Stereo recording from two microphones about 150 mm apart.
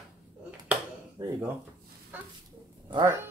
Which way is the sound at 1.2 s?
20° right (ahead or behind).